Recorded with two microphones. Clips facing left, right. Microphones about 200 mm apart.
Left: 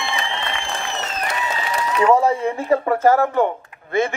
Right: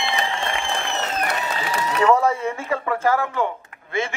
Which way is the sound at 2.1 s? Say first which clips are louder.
Left 3 dB; 30° left (ahead or behind).